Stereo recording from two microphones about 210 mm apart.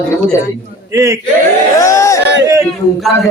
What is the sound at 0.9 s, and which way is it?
Speech, 15° right (ahead or behind).